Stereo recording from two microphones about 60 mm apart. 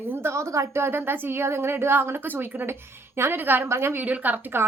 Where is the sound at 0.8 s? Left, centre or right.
Right.